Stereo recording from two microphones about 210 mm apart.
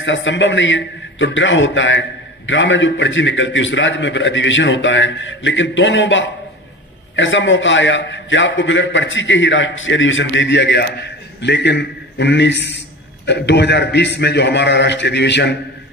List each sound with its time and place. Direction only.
0.0 s a man's voice: 60° left (ahead or behind)